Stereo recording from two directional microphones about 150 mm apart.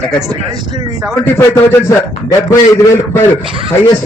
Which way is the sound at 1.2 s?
15° left (ahead or behind).